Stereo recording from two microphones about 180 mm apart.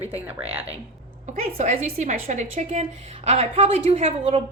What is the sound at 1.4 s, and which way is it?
A woman's voice, 40° right (ahead or behind).